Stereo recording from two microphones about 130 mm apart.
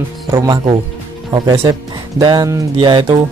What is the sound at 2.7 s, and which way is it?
Speech, 40° right (ahead or behind).